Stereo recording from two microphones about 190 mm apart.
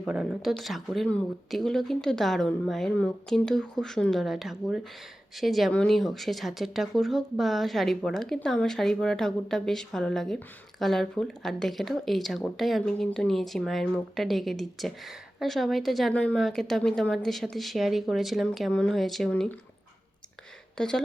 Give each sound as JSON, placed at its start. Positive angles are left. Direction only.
{"t": 0.0, "sound": "speech", "side_deg": -5}
{"t": 20.7, "sound": "speech", "side_deg": 5}